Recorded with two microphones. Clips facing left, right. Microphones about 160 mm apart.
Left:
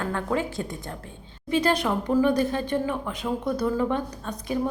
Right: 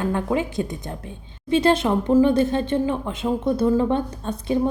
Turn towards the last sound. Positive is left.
turn(degrees=-25)  # may be behind; listen again after turning